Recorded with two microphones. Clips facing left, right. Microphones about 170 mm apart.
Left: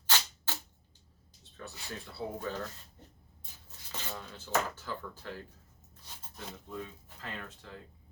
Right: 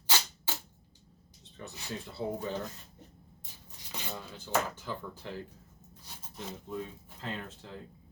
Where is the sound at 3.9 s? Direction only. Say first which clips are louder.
Right 1 dB; 15° right (ahead or behind).